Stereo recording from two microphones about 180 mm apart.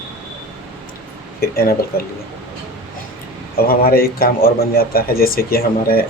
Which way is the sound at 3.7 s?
55° left (ahead or behind).